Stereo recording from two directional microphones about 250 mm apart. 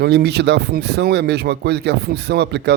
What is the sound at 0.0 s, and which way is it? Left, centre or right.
Speech, right.